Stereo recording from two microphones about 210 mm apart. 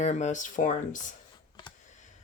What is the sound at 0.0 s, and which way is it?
Speech, 35° left (ahead or behind).